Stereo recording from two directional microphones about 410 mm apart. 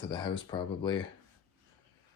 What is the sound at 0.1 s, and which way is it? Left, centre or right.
Speech, centre.